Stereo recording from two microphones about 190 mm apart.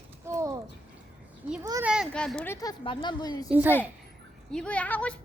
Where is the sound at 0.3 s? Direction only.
15° right (ahead or behind).